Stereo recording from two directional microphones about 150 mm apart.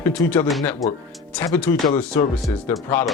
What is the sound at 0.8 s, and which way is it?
Speech, centre (ahead or behind).